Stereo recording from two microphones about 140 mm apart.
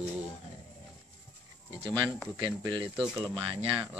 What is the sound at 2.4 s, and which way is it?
Speech, 35° right (ahead or behind).